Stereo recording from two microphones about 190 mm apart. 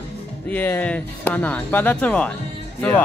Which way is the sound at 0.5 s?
10° left (ahead or behind).